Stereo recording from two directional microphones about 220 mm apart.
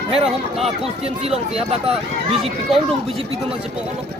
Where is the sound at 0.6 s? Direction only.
25° right (ahead or behind).